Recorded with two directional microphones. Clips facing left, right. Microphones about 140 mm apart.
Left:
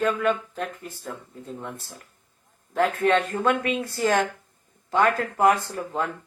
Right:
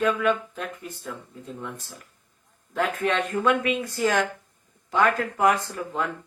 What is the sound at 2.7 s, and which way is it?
Speech, 40° left (ahead or behind).